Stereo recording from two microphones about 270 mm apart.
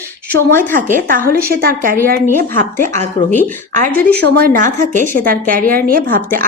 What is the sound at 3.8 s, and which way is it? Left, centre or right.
Speech, centre.